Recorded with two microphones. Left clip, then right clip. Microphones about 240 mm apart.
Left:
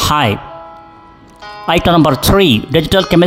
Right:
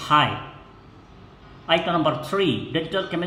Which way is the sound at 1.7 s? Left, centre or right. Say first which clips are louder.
Left 10 dB; left.